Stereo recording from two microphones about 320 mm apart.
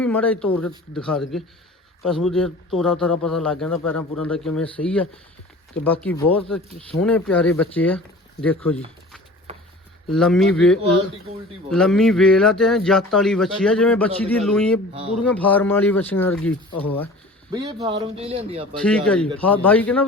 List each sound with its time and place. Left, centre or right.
0.0 s speech: centre
9.5 s a sound: centre
10.1 s speech: centre
17.5 s speech: centre
18.8 s speech: centre